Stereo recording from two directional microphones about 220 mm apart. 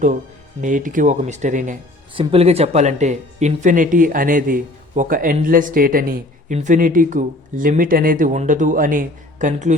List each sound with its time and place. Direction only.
0.6 s speech: 35° right (ahead or behind)